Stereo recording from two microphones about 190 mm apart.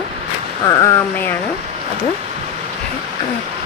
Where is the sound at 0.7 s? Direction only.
15° left (ahead or behind).